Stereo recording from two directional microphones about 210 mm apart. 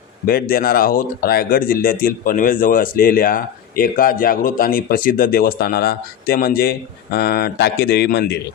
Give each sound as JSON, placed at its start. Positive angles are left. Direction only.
{"t": 0.3, "sound": "speech", "side_deg": 45}